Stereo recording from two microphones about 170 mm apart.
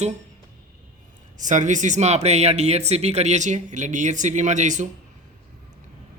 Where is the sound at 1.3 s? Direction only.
45° right (ahead or behind).